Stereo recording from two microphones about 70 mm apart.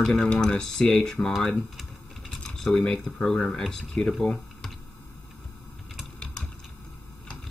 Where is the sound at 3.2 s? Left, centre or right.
Left.